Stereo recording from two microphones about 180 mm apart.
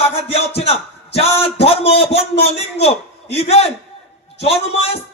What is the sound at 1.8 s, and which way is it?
Speech, 75° left (ahead or behind).